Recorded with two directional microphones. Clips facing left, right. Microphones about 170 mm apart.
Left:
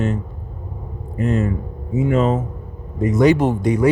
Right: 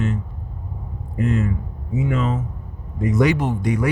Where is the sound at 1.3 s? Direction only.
40° left (ahead or behind).